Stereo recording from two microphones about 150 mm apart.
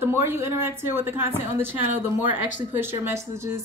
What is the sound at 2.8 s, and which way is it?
Speech, 15° right (ahead or behind).